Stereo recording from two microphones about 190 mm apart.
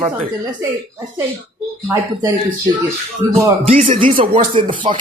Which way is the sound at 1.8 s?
15° right (ahead or behind).